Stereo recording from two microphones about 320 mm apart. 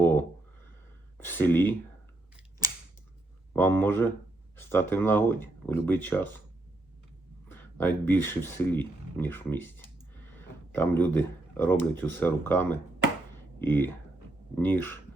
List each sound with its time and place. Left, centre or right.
0.0 s a sound: centre
1.2 s speech: centre
3.5 s speech: centre
7.4 s speech: centre
13.3 s chopping: centre
14.5 s speech: centre